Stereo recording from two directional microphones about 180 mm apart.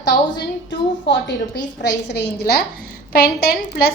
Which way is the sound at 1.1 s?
70° left (ahead or behind).